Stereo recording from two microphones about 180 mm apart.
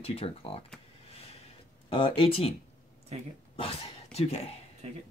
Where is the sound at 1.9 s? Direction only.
30° left (ahead or behind).